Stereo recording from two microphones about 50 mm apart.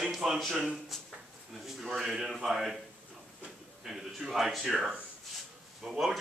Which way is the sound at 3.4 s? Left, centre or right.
Centre.